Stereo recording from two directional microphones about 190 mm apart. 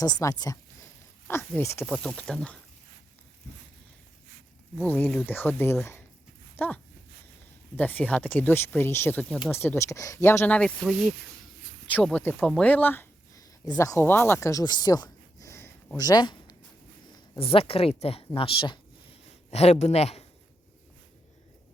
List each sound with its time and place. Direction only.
0.2 s speech: 20° left (ahead or behind)
1.8 s speech: 5° left (ahead or behind)
4.8 s speech: 10° left (ahead or behind)
7.8 s speech: 10° left (ahead or behind); by 20.2 s 35° left (ahead or behind)